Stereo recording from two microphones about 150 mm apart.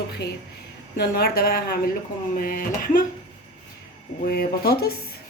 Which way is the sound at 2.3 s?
65° left (ahead or behind).